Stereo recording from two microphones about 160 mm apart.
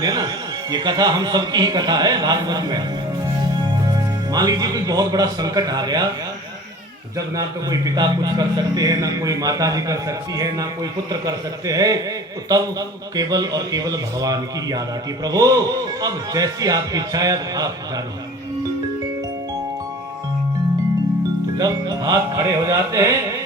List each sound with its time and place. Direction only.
0.0 s music: 25° right (ahead or behind)
0.7 s speech: 25° right (ahead or behind)
4.3 s speech: 25° right (ahead or behind)
7.3 s speech: 20° right (ahead or behind)
21.6 s speech: 25° right (ahead or behind)